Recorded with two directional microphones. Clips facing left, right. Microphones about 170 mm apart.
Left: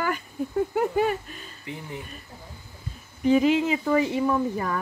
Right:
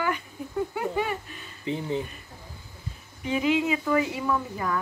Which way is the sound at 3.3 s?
35° left (ahead or behind).